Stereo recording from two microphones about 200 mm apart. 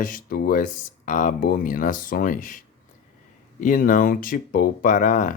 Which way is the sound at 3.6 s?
40° left (ahead or behind).